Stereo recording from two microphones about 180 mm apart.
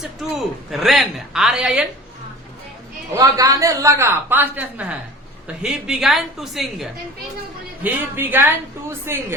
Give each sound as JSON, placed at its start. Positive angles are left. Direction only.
{"t": 0.0, "sound": "a man's voice", "side_deg": 0}
{"t": 3.2, "sound": "a woman's voice", "side_deg": -20}
{"t": 7.9, "sound": "a woman's voice", "side_deg": -10}